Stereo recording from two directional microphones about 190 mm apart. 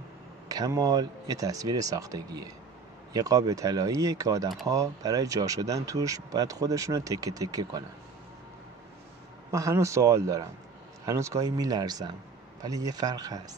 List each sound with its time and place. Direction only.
0.5 s speech: 20° right (ahead or behind)
9.5 s speech: 15° right (ahead or behind)